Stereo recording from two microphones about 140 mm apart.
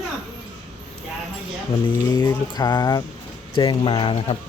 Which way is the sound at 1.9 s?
30° left (ahead or behind).